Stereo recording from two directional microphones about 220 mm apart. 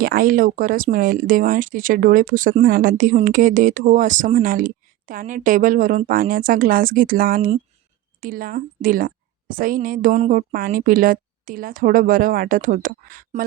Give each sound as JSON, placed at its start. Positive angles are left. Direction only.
{"t": 0.0, "sound": "speech", "side_deg": -40}